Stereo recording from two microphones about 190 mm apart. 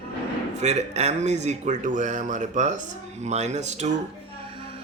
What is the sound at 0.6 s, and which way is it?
Speech, 35° right (ahead or behind).